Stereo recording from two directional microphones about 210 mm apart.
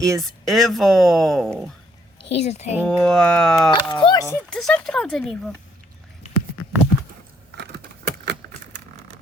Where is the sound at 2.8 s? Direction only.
5° left (ahead or behind).